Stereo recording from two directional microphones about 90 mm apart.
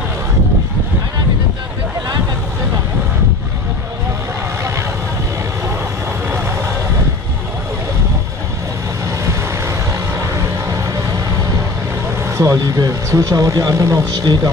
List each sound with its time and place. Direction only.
12.2 s vehicle: 30° right (ahead or behind)
12.7 s speech: 35° right (ahead or behind)